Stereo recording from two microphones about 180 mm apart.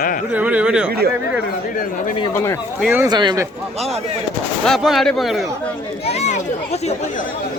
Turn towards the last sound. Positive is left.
turn(degrees=40)  # may be behind; listen again after turning